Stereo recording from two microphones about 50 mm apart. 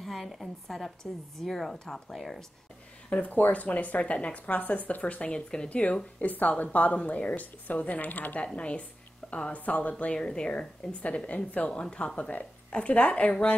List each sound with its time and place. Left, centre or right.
0.0 s a woman's voice: centre
3.1 s a woman's voice: left
8.5 s a woman's voice: left
10.1 s a woman's voice: centre